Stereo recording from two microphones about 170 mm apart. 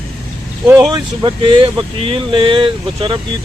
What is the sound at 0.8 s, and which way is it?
Speech, 25° right (ahead or behind).